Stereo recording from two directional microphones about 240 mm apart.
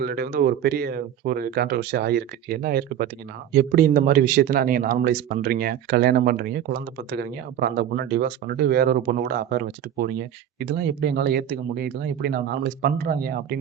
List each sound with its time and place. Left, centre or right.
0.0 s speech: right